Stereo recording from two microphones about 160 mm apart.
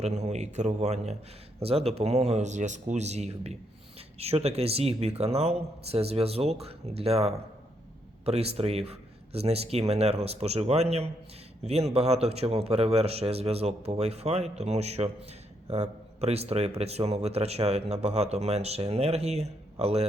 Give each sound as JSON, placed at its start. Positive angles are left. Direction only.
{"t": 0.0, "sound": "speech", "side_deg": -45}